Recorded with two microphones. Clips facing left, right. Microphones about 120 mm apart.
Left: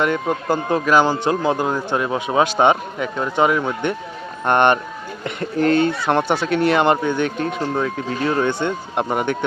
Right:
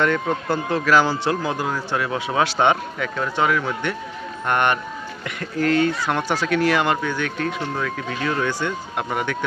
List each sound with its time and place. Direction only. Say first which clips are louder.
0.0 s speech: left 1 dB; 15° left (ahead or behind)